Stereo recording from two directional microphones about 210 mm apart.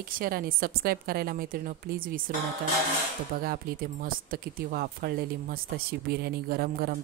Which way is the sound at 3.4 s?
45° right (ahead or behind).